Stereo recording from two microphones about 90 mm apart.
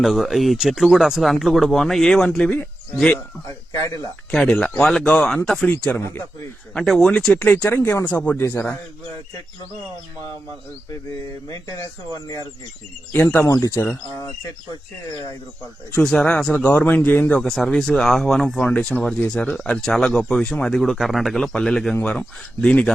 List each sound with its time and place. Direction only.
0.0 s speech: centre (ahead or behind)
3.8 s speech: 40° left (ahead or behind)
4.4 s speech: 15° left (ahead or behind)
4.8 s speech: 5° left (ahead or behind)
6.7 s speech: 5° left (ahead or behind)
7.4 s speech: 20° left (ahead or behind)
12.1 s speech: 40° left (ahead or behind)
13.1 s speech: 25° left (ahead or behind)
16.0 s speech: 5° left (ahead or behind)
17.3 s speech: 5° left (ahead or behind)
18.7 s speech: 15° left (ahead or behind)